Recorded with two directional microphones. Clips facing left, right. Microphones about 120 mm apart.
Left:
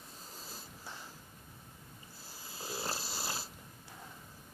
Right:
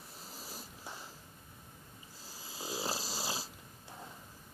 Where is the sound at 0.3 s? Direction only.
90° right.